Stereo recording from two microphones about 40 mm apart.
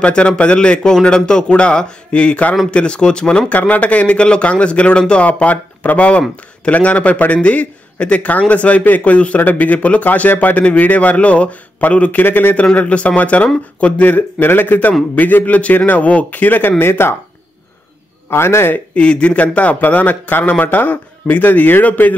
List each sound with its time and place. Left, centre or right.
0.0 s speech: left
3.4 s a man's voice: left
11.0 s a man's voice: left
12.2 s a man's voice: left
12.7 s a man's voice: left
14.0 s a man's voice: left
16.7 s speech: left
18.3 s a man's voice: left
18.9 s a man's voice: left